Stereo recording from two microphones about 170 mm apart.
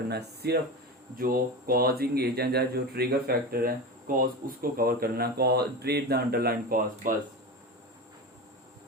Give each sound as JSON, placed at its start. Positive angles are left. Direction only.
{"t": 0.1, "sound": "speech", "side_deg": -70}
{"t": 1.1, "sound": "speech", "side_deg": -55}